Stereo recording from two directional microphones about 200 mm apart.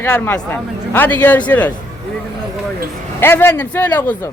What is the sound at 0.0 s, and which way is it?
Speech, 10° left (ahead or behind).